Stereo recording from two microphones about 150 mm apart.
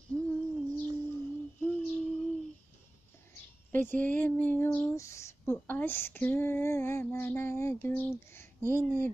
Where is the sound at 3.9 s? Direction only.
10° left (ahead or behind).